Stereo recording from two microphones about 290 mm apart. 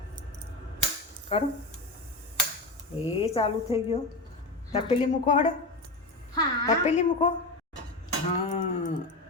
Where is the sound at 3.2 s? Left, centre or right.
Centre.